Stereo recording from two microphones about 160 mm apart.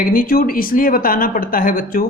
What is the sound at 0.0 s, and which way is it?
Speech, 65° left (ahead or behind).